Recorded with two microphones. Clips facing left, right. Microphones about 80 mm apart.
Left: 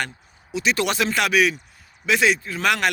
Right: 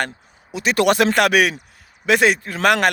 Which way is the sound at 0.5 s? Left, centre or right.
Right.